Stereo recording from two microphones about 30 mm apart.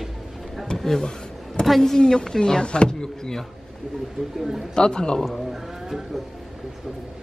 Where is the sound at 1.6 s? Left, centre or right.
Left.